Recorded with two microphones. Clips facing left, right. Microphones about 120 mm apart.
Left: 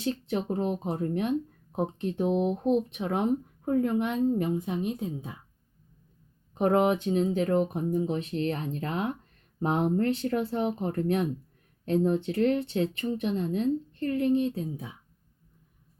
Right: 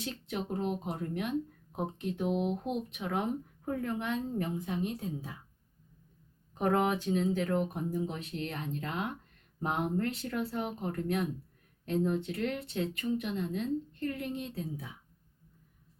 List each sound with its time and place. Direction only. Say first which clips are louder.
0.0 s speech: left 7 dB; 30° left (ahead or behind)
6.5 s speech: left 5 dB; 20° left (ahead or behind)